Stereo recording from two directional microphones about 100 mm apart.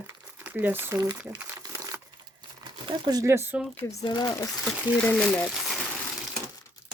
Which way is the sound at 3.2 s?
25° right (ahead or behind).